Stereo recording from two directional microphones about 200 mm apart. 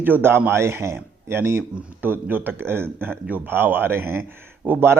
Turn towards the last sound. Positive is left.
turn(degrees=-10)  # may be behind; listen again after turning